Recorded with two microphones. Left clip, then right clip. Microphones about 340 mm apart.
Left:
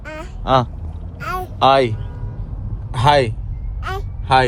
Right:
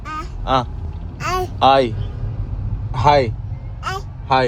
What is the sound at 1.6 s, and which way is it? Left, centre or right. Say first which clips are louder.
Speech: even; left.